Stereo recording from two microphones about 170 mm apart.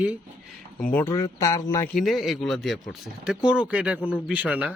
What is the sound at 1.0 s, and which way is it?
Speech, 20° left (ahead or behind).